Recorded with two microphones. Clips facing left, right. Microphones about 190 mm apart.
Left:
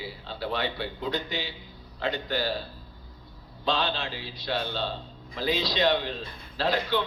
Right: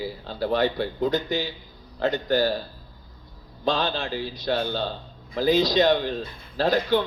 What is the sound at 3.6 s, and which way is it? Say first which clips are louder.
Speech: right 3 dB; 45° right (ahead or behind).